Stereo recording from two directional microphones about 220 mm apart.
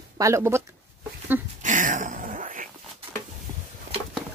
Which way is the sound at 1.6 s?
35° right (ahead or behind).